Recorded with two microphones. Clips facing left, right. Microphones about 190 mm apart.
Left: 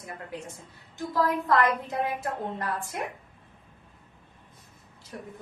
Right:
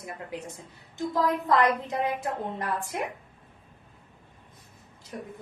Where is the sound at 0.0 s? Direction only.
20° right (ahead or behind).